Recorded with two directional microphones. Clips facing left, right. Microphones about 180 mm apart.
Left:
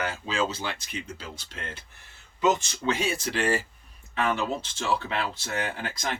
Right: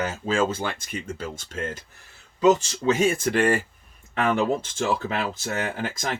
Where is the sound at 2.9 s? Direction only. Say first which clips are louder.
Right 7 dB; 50° right (ahead or behind).